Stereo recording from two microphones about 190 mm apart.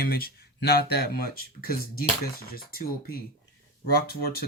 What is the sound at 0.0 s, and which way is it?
Speech, 50° left (ahead or behind).